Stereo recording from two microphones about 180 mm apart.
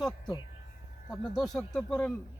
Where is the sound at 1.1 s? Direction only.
Centre (ahead or behind).